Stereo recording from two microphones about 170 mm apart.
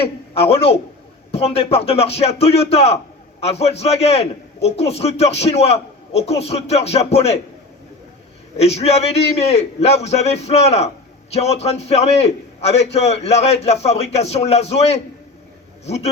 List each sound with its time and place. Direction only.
0.0 s a man's voice: 35° left (ahead or behind)
8.5 s a man's voice: 40° left (ahead or behind)